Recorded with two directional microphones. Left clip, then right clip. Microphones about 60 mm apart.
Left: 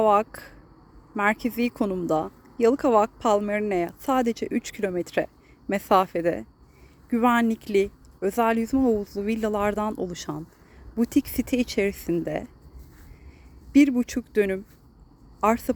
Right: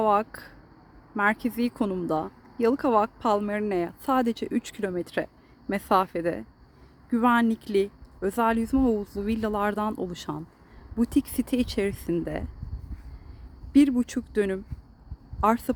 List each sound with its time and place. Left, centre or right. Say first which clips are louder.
0.0 s speech: left 3 dB; centre
1.1 s speech: left 1 dB; centre
3.4 s speech: left 2 dB; centre
10.9 s speech: left 2 dB; centre
13.7 s speech: left 2 dB; centre